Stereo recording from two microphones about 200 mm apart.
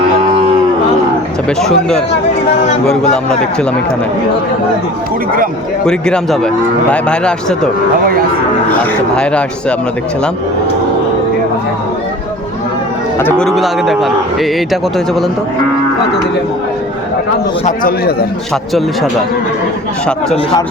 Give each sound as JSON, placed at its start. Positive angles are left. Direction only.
{"t": 1.5, "sound": "speech", "side_deg": 5}
{"t": 5.8, "sound": "speech", "side_deg": 5}
{"t": 9.1, "sound": "speech", "side_deg": 5}
{"t": 13.4, "sound": "speech", "side_deg": 0}
{"t": 17.7, "sound": "a man's voice", "side_deg": 45}